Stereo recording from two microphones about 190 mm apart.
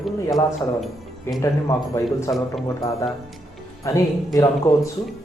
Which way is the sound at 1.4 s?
15° left (ahead or behind).